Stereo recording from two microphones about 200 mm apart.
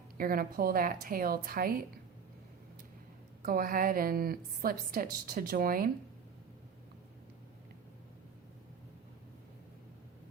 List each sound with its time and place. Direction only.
0.2 s a woman's voice: 45° right (ahead or behind)
3.4 s a woman's voice: 45° right (ahead or behind)